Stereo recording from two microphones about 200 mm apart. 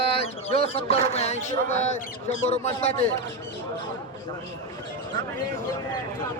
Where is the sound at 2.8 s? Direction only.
30° left (ahead or behind).